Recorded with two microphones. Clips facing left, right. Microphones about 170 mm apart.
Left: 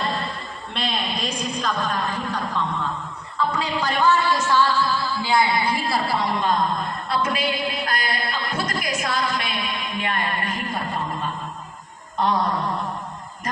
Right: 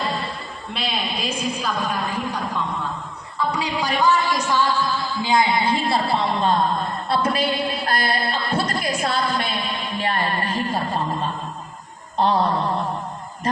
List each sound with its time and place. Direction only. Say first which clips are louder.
0.7 s a man's voice: even; 5° right (ahead or behind)
3.3 s music: even; 10° right (ahead or behind); by 11.3 s 30° right (ahead or behind)
12.1 s mantra: right 3 dB; 30° right (ahead or behind)